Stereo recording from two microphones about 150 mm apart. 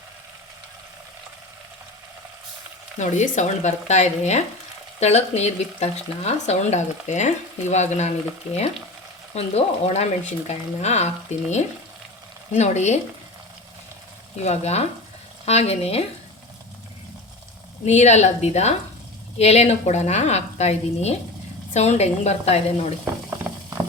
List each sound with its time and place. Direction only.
3.0 s speech: 55° left (ahead or behind)
9.3 s speech: 45° left (ahead or behind)
14.4 s speech: 45° left (ahead or behind)
17.8 s speech: 50° left (ahead or behind)